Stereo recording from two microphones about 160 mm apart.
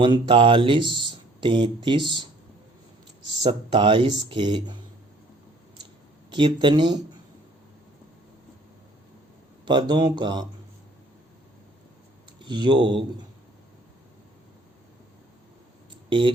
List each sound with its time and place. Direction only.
0.0 s speech: 30° right (ahead or behind)
3.4 s speech: 30° right (ahead or behind)
6.3 s speech: 30° right (ahead or behind)
9.6 s speech: 30° right (ahead or behind)
12.4 s speech: 30° right (ahead or behind)
16.0 s speech: 30° right (ahead or behind)